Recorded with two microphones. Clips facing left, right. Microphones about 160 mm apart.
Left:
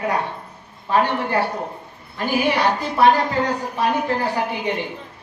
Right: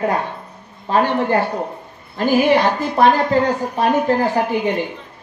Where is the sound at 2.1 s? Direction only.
45° right (ahead or behind).